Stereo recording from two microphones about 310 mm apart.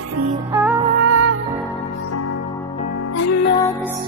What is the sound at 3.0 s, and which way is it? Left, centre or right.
Music, left.